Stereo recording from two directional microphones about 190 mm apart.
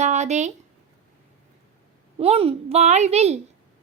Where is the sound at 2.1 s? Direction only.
30° right (ahead or behind).